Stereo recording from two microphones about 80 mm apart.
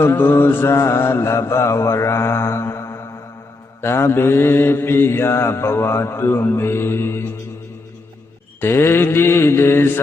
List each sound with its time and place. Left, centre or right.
0.0 s mantra: left
8.6 s mantra: left